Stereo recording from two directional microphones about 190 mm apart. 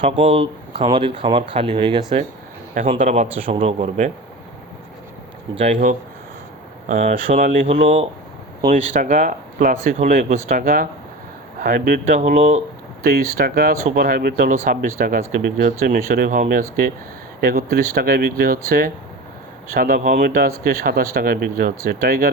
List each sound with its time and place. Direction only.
0.0 s speech: 30° right (ahead or behind)
5.5 s speech: 40° right (ahead or behind)
13.0 s speech: 55° right (ahead or behind)
19.7 s speech: 50° right (ahead or behind)